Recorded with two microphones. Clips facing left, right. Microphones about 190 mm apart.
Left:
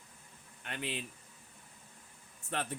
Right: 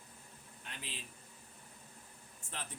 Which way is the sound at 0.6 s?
65° left (ahead or behind).